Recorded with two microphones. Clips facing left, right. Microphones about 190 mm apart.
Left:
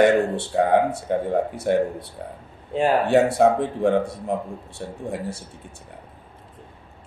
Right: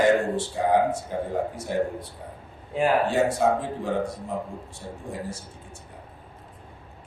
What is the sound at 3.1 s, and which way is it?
A man's voice, 65° left (ahead or behind).